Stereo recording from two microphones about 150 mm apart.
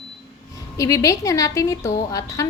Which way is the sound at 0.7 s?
20° left (ahead or behind).